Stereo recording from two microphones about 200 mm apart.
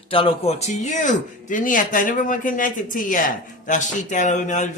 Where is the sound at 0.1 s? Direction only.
25° left (ahead or behind).